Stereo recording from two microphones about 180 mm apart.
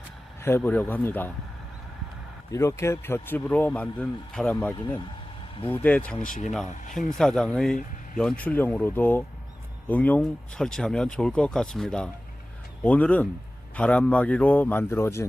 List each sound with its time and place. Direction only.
0.4 s speech: 15° left (ahead or behind)
2.5 s speech: 15° left (ahead or behind)
6.2 s speech: 50° left (ahead or behind)
7.2 s speech: centre (ahead or behind)